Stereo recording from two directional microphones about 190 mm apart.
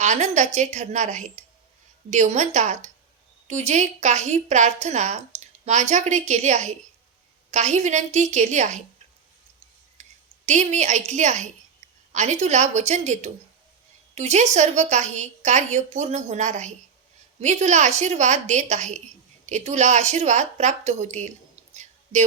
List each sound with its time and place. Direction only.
0.0 s a woman's voice: 40° right (ahead or behind)
10.0 s a woman's voice: 40° right (ahead or behind)